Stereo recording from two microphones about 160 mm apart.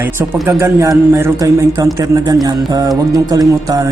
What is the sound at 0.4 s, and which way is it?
Speech, 15° right (ahead or behind).